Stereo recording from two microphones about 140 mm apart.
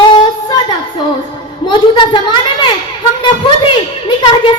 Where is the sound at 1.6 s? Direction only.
35° left (ahead or behind).